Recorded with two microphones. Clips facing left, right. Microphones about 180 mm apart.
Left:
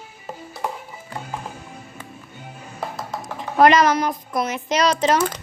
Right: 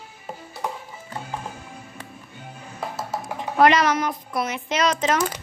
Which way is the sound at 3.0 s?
10° right (ahead or behind).